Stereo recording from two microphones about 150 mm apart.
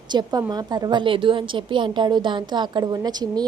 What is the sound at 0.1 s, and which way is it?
A woman's voice, 25° right (ahead or behind).